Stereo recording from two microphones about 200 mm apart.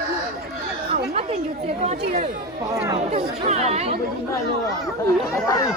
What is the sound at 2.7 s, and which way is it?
Speech, 15° right (ahead or behind).